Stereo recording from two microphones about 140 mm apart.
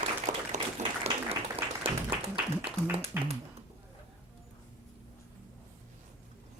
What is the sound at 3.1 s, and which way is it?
Speech, 15° right (ahead or behind).